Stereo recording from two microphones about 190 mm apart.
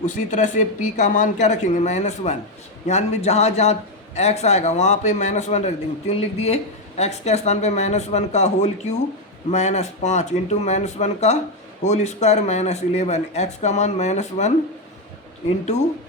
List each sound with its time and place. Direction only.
0.0 s a man's voice: 40° left (ahead or behind)